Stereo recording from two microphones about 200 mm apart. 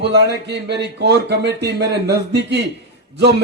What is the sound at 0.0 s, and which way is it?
Speech, 60° right (ahead or behind).